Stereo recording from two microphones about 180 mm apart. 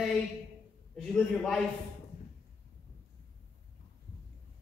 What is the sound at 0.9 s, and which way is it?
Speech, 5° left (ahead or behind).